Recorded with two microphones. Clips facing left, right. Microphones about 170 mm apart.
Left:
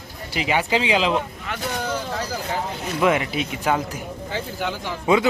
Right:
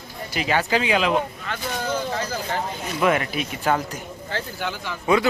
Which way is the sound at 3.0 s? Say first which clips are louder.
Left 1 dB; 15° left (ahead or behind).